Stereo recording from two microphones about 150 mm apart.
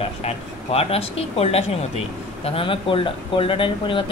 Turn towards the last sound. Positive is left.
turn(degrees=35)  # may be behind; listen again after turning